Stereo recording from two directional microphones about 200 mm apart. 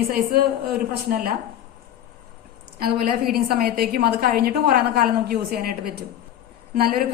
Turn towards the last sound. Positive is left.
turn(degrees=-45)  # may be behind; listen again after turning